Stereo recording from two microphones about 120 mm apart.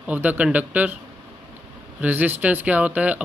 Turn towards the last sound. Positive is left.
turn(degrees=-10)  # may be behind; listen again after turning